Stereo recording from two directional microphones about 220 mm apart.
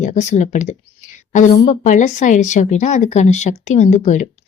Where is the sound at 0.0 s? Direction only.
30° left (ahead or behind).